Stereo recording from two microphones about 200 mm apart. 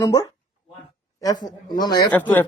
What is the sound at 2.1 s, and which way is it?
Speech, 10° left (ahead or behind).